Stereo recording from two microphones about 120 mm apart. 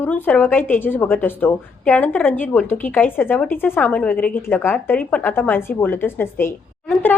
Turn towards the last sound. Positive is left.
turn(degrees=15)  # may be behind; listen again after turning